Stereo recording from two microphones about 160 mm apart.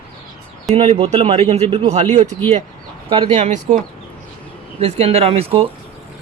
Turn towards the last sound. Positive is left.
turn(degrees=-40)  # may be behind; listen again after turning